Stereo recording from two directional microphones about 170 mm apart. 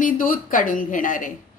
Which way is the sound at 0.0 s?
55° left (ahead or behind).